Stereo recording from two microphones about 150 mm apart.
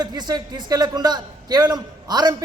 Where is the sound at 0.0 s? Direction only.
25° right (ahead or behind).